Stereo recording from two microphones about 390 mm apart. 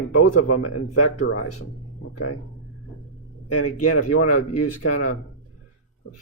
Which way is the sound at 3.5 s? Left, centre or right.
Left.